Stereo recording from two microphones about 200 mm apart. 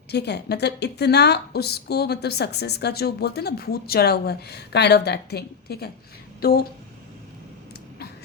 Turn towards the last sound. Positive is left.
turn(degrees=50)  # may be behind; listen again after turning